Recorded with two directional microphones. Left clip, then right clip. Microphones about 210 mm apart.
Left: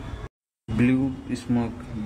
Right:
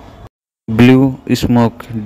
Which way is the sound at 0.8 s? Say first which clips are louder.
Right 14 dB; 45° right (ahead or behind).